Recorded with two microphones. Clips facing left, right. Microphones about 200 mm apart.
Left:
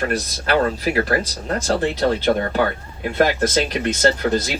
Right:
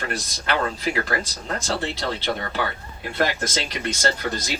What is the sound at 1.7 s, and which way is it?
Speech, 50° left (ahead or behind).